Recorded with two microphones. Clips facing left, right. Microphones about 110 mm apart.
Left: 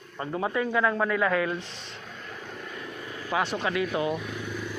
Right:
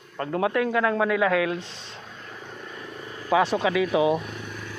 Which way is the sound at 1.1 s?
90° right.